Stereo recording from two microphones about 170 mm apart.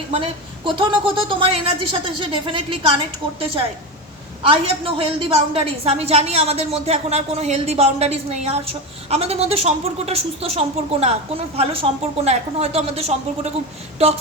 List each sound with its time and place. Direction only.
0.1 s a woman's voice: 30° right (ahead or behind)
4.4 s a woman's voice: 30° right (ahead or behind)